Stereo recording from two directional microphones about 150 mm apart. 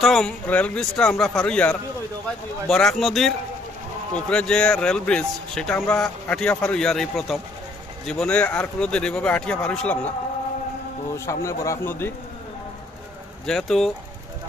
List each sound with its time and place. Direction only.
0.0 s speech: 5° left (ahead or behind)
11.1 s speech: 20° left (ahead or behind)
13.5 s speech: centre (ahead or behind)